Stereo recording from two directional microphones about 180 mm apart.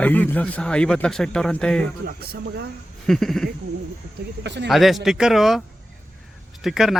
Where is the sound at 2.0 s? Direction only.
60° right (ahead or behind).